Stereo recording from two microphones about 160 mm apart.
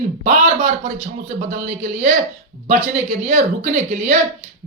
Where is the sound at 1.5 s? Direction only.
50° right (ahead or behind).